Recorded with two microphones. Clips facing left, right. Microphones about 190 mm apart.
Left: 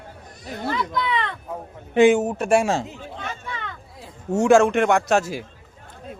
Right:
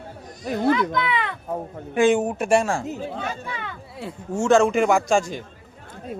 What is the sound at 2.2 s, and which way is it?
Speech, 15° right (ahead or behind).